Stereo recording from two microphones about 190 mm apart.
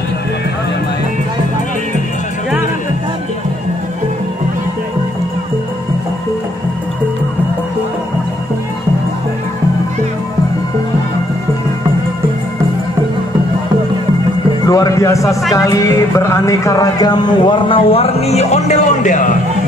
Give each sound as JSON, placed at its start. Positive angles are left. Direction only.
{"t": 14.7, "sound": "speech", "side_deg": 15}